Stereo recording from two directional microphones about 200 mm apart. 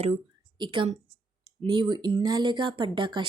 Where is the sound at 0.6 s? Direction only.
25° right (ahead or behind).